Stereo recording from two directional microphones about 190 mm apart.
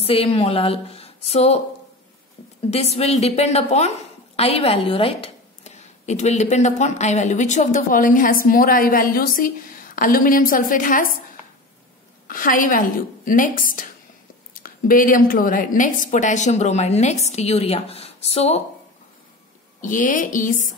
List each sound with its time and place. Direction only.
0.0 s a woman's voice: 30° left (ahead or behind)
2.7 s a woman's voice: 35° left (ahead or behind)
12.3 s a woman's voice: 45° left (ahead or behind)
19.8 s a woman's voice: 45° left (ahead or behind)